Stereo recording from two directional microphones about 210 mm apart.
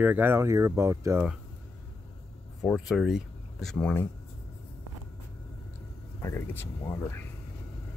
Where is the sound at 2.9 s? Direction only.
Centre (ahead or behind).